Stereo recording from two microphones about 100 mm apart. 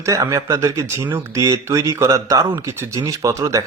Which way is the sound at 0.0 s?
30° right (ahead or behind).